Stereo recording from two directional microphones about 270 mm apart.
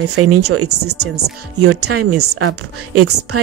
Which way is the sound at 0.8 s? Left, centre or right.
Right.